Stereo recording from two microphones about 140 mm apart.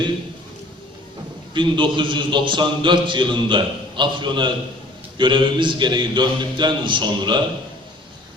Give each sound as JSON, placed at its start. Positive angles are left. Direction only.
{"t": 1.5, "sound": "a man's voice", "side_deg": -35}